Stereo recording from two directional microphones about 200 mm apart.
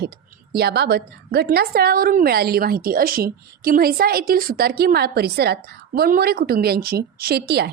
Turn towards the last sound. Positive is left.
turn(degrees=-55)  # may be behind; listen again after turning